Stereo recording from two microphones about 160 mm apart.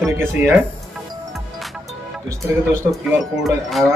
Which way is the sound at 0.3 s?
15° right (ahead or behind).